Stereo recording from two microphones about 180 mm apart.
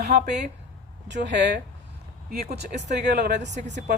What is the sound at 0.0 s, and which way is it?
Speech, 60° right (ahead or behind).